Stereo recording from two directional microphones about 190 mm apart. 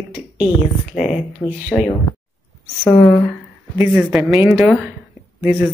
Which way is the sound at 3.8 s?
5° right (ahead or behind).